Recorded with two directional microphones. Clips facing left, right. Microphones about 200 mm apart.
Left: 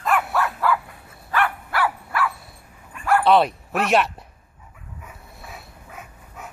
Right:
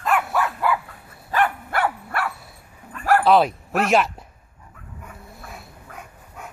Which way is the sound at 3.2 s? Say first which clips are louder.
Left 1 dB; centre (ahead or behind).